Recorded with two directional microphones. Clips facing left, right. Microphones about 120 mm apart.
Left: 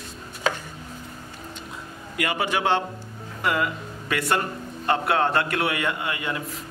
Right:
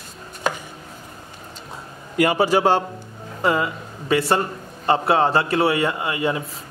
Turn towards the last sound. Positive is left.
turn(degrees=-30)  # may be behind; listen again after turning